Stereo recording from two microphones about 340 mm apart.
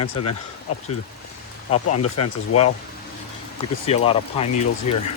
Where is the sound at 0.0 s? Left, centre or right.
Left.